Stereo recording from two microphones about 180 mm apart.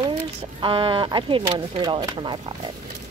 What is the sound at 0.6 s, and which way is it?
A woman's voice, 30° right (ahead or behind).